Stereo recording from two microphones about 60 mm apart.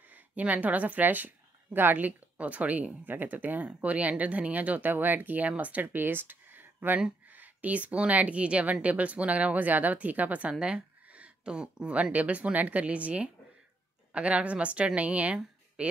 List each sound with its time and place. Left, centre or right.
0.1 s a woman's voice: right